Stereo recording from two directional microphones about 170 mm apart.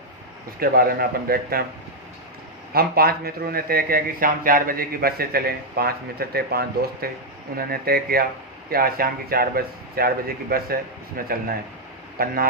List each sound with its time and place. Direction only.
0.6 s speech: 60° right (ahead or behind)
2.7 s speech: 60° right (ahead or behind)